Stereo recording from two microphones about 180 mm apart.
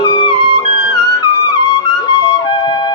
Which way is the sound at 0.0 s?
25° left (ahead or behind).